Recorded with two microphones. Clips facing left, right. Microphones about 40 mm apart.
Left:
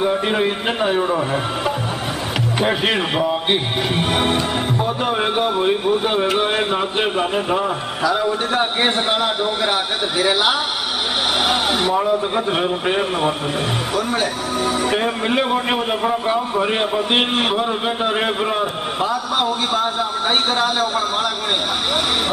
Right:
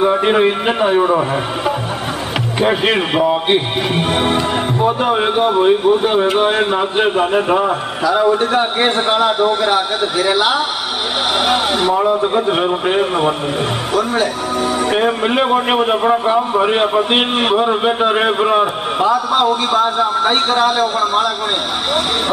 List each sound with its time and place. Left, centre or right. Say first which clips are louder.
0.0 s a man's voice: right 6 dB; centre
2.6 s a man's voice: right 5 dB; centre
7.3 s a man's voice: right 5 dB; centre
14.2 s a man's voice: right 3 dB; centre
14.9 s a man's voice: right 4 dB; centre
19.4 s a man's voice: right 5 dB; centre